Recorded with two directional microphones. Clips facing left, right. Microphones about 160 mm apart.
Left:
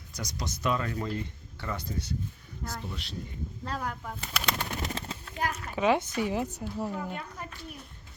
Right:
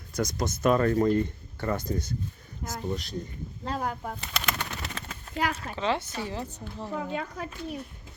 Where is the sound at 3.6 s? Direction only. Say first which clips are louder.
Right 4 dB; 30° right (ahead or behind).